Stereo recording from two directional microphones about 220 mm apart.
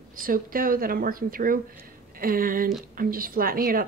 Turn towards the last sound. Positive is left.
turn(degrees=-40)  # may be behind; listen again after turning